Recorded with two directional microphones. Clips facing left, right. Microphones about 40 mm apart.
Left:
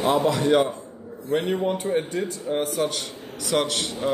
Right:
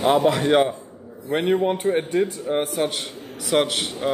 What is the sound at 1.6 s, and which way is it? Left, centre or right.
A man's voice, right.